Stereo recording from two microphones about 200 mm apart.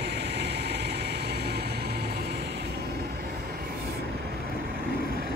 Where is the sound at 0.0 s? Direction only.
55° right (ahead or behind).